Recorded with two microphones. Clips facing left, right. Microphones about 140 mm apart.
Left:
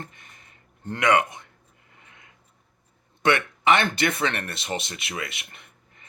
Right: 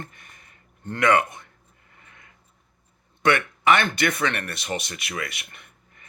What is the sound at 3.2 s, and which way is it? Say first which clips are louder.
Speech: right 1 dB; 25° left (ahead or behind).